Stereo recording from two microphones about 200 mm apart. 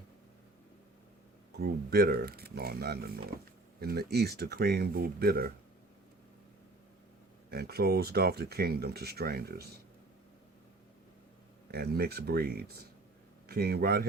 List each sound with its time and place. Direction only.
1.5 s speech: 50° right (ahead or behind)
7.5 s speech: 50° right (ahead or behind)
11.7 s speech: 50° right (ahead or behind)